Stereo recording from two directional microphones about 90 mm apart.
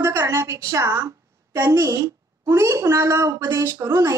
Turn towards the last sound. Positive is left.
turn(degrees=-30)  # may be behind; listen again after turning